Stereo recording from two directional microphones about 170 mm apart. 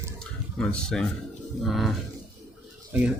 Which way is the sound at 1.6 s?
Centre (ahead or behind).